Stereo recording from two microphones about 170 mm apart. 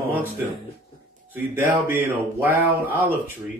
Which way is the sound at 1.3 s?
10° right (ahead or behind).